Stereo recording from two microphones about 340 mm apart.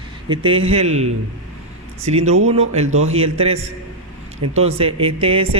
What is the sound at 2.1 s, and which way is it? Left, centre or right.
Speech, centre.